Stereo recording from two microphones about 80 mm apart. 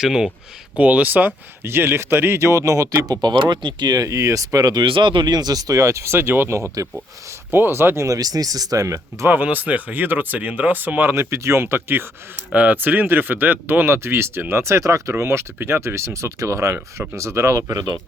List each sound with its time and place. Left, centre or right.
0.0 s speech: centre
0.8 s speech: centre; by 3.2 s right
3.2 s speech: right
4.0 s speech: right
4.8 s speech: right
9.3 s speech: right